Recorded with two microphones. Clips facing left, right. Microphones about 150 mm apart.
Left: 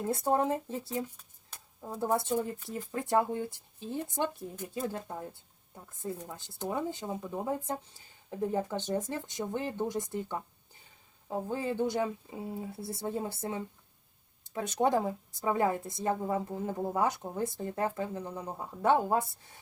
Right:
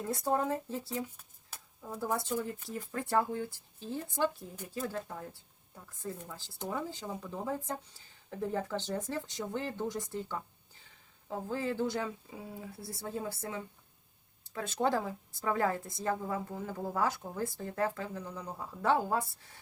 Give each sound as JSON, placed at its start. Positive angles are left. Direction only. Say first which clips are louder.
{"t": 0.1, "sound": "speech", "louder": "left 3 dB", "side_deg": 25}